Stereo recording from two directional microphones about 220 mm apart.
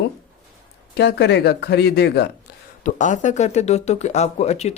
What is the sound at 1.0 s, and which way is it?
Speech, 50° left (ahead or behind).